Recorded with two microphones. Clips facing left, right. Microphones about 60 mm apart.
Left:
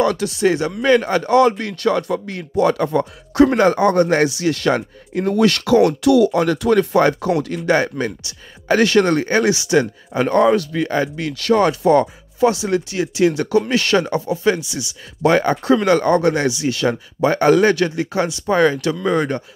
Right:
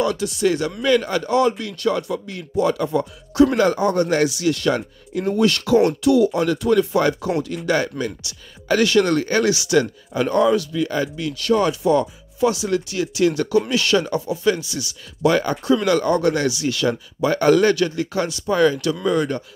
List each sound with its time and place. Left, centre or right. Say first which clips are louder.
0.0 s speech: left 3 dB; left
0.4 s speech: left 2 dB; left
5.2 s speech: left 3 dB; left
6.6 s speech: left 3 dB; left
13.7 s speech: left 2 dB; left
14.6 s speech: left 1 dB; centre
15.2 s speech: left 3 dB; left